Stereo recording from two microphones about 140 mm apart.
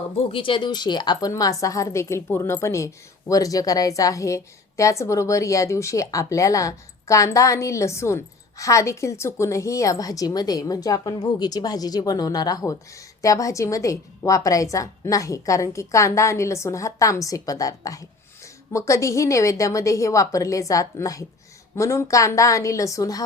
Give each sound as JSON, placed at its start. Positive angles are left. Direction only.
{"t": 0.3, "sound": "a woman's voice", "side_deg": 40}